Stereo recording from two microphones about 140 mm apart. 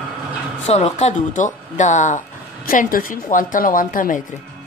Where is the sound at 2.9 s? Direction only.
75° left (ahead or behind).